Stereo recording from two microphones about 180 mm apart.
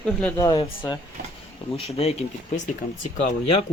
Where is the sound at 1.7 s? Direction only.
35° left (ahead or behind).